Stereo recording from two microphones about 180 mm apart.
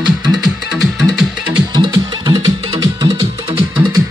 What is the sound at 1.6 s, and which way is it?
Music, 25° right (ahead or behind).